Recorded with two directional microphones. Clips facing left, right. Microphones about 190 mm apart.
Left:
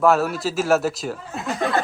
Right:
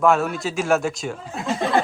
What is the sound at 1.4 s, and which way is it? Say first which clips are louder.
Snicker: right 2 dB; 20° right (ahead or behind).